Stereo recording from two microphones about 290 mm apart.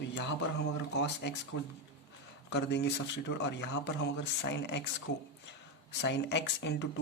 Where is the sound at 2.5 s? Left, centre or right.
Left.